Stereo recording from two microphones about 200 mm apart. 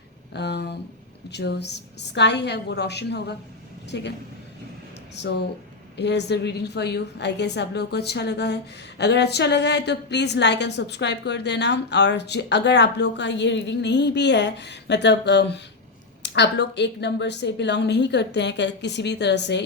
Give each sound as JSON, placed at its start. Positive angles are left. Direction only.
{"t": 0.3, "sound": "a woman's voice", "side_deg": 60}
{"t": 6.0, "sound": "a woman's voice", "side_deg": 60}